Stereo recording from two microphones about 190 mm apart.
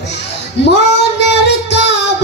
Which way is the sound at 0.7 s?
65° left (ahead or behind).